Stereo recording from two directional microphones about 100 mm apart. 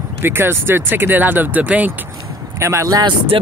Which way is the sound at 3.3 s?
60° right (ahead or behind).